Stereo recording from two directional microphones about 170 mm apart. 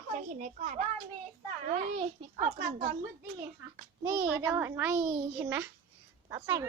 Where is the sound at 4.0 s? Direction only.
15° right (ahead or behind).